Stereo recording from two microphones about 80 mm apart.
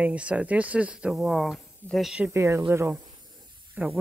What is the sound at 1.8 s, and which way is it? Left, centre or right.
Speech, left.